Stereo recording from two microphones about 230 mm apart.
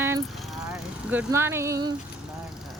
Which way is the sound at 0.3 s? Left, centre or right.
Centre.